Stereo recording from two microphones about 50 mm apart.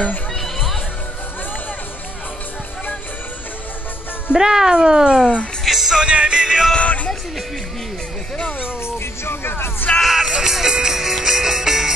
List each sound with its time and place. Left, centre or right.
4.3 s speech: centre
5.7 s music: centre
5.9 s speech: right
8.8 s music: left
10.0 s music: centre